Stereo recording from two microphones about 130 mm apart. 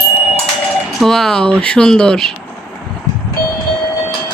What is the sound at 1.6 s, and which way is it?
Speech, 5° left (ahead or behind).